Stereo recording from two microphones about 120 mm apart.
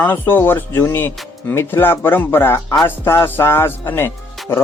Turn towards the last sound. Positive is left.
turn(degrees=15)  # may be behind; listen again after turning